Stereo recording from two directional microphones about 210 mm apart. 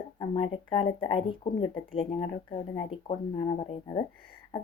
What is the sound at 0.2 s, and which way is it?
Speech, 25° left (ahead or behind).